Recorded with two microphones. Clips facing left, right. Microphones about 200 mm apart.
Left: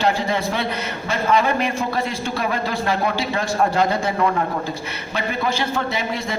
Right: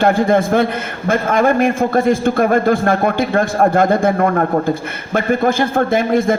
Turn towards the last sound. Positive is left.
turn(degrees=-50)  # may be behind; listen again after turning